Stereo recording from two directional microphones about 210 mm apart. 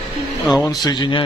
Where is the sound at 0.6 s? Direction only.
20° left (ahead or behind).